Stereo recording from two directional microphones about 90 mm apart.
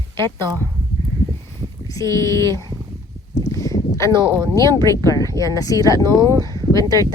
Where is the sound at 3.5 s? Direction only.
40° left (ahead or behind).